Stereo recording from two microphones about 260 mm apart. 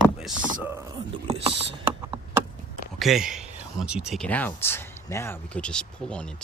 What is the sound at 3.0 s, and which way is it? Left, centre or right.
Speech, centre.